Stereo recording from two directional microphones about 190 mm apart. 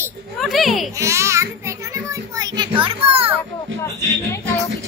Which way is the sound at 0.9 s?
15° right (ahead or behind).